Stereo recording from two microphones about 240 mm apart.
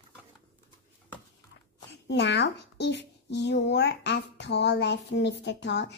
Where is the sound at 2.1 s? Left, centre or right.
Left.